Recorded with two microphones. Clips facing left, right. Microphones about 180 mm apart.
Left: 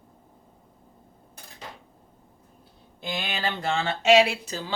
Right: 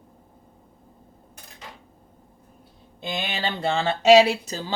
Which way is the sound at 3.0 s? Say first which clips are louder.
Right 2 dB; 20° right (ahead or behind).